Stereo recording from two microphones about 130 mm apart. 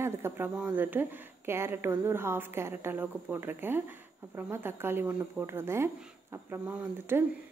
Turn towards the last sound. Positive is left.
turn(degrees=-15)  # may be behind; listen again after turning